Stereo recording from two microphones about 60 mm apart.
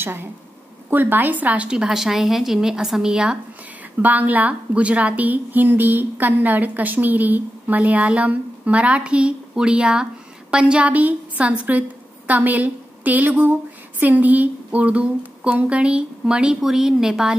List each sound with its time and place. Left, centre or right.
0.0 s a woman's voice: right; by 3.3 s centre
4.0 s a woman's voice: right; by 17.4 s centre